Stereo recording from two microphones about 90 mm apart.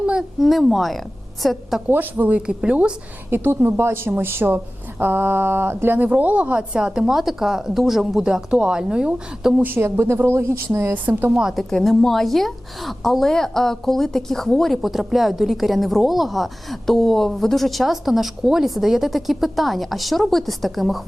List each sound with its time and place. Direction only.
0.0 s a sound: 10° right (ahead or behind)
0.3 s a woman's voice: centre (ahead or behind)
1.9 s a woman's voice: 20° right (ahead or behind)
3.2 s a woman's voice: 25° right (ahead or behind); by 9.6 s 10° right (ahead or behind)
9.6 s speech: 25° right (ahead or behind)
11.4 s a woman's voice: centre (ahead or behind)